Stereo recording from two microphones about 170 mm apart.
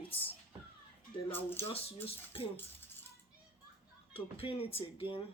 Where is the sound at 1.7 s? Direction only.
35° left (ahead or behind).